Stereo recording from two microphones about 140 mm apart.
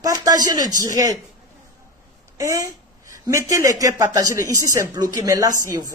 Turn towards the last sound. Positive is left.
turn(degrees=-25)  # may be behind; listen again after turning